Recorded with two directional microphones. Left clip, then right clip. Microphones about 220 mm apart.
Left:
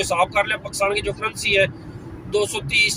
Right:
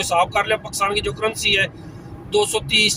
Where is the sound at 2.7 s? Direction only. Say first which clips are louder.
Right 1 dB; 20° right (ahead or behind).